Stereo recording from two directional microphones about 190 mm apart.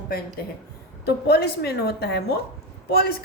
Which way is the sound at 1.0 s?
55° left (ahead or behind).